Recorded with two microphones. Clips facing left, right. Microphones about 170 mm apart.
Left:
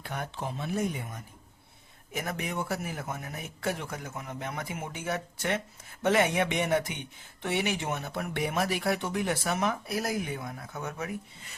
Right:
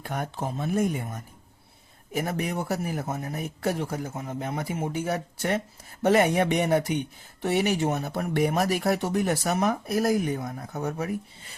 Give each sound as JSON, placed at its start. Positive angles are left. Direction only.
{"t": 0.0, "sound": "speech", "side_deg": -45}
{"t": 2.1, "sound": "speech", "side_deg": -35}